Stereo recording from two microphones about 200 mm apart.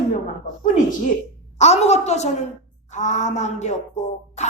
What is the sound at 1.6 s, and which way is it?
A woman's voice, 35° left (ahead or behind).